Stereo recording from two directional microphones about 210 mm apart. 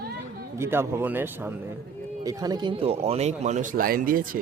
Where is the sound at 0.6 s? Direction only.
10° right (ahead or behind).